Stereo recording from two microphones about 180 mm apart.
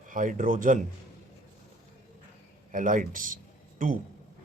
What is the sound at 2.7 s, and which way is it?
Speech, 45° right (ahead or behind).